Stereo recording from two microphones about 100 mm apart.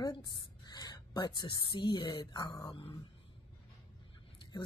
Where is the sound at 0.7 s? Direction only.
45° left (ahead or behind).